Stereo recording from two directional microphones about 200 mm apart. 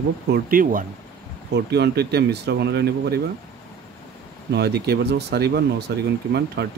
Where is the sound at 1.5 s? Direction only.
55° right (ahead or behind).